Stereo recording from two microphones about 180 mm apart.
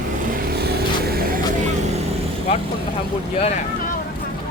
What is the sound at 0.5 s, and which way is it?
Vehicle, 60° right (ahead or behind).